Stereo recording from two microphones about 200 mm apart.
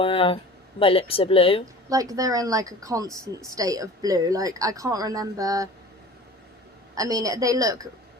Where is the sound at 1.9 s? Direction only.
15° right (ahead or behind).